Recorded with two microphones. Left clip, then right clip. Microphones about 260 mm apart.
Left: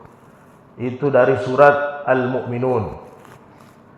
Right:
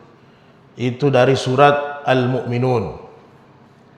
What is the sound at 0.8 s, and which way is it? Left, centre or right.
A man's voice, right.